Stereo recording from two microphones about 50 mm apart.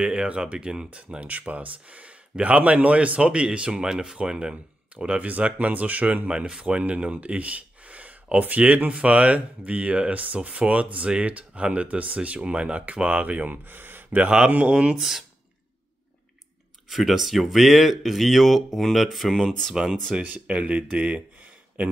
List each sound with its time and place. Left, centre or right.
0.0 s speech: right
14.5 s speech: right
15.0 s speech: centre
16.9 s speech: centre
20.2 s speech: right